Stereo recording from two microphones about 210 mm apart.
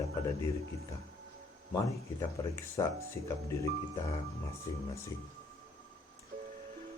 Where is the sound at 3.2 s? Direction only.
15° left (ahead or behind).